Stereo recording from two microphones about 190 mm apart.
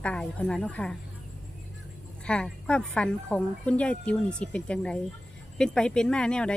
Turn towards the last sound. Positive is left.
turn(degrees=5)  # may be behind; listen again after turning